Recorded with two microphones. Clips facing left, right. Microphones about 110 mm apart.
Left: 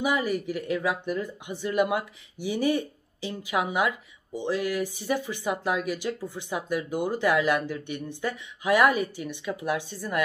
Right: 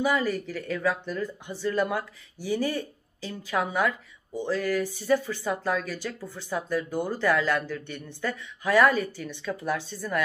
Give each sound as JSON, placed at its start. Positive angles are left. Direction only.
{"t": 0.0, "sound": "speech", "side_deg": 15}